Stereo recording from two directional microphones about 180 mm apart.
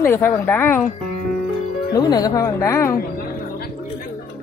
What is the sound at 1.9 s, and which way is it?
A woman's voice, 20° left (ahead or behind).